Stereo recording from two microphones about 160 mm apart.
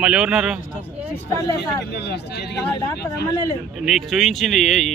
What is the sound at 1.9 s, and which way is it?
Speech, 90° left.